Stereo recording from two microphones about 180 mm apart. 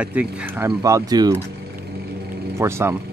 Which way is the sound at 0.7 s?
20° right (ahead or behind).